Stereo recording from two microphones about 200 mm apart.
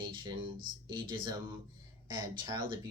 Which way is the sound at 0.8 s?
20° right (ahead or behind).